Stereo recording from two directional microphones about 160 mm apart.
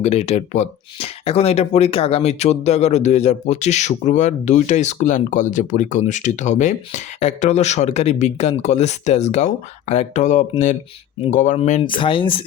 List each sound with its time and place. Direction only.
0.0 s speech: 45° left (ahead or behind)
11.8 s speech: 30° left (ahead or behind)